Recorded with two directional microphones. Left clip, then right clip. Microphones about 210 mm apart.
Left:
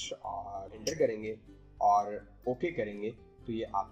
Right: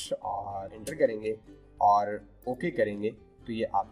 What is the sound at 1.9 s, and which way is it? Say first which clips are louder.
Speech: right 2 dB; 15° left (ahead or behind).